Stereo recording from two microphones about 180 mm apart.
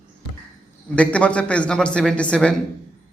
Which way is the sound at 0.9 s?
5° left (ahead or behind).